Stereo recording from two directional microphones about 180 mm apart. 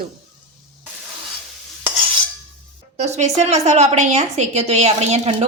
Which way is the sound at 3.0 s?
40° right (ahead or behind).